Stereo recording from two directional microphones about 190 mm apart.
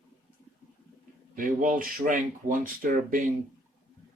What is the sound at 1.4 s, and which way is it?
Speech, 45° right (ahead or behind).